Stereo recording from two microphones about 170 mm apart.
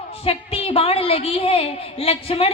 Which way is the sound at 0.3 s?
35° left (ahead or behind).